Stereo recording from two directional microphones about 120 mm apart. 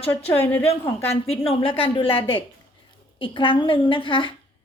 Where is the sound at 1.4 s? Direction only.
45° left (ahead or behind).